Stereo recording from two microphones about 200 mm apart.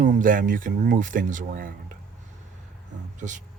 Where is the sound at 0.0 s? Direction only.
40° right (ahead or behind).